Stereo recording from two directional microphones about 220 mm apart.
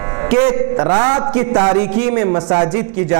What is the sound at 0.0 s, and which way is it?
A man's voice, 20° right (ahead or behind).